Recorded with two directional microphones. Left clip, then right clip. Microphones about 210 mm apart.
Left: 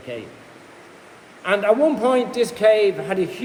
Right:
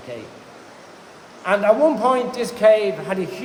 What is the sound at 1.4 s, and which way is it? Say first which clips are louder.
A man's voice: right 1 dB; 70° left (ahead or behind).